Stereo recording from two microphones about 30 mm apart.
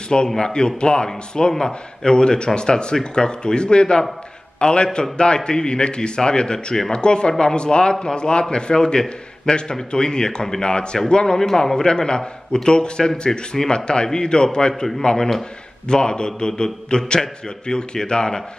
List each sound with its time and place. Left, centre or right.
0.1 s speech: centre
0.5 s a man's voice: left
11.3 s a man's voice: centre
15.9 s speech: left